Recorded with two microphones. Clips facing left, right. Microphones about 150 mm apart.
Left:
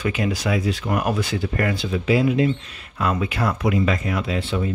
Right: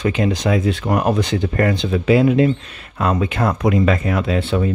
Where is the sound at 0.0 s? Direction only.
35° right (ahead or behind).